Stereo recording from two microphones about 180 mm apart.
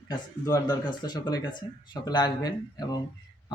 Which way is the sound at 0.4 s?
20° left (ahead or behind).